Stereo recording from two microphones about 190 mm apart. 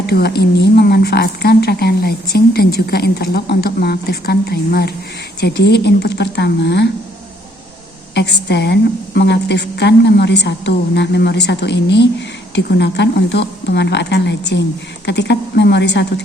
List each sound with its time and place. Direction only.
0.0 s speech: 55° left (ahead or behind)
8.1 s speech: 65° left (ahead or behind)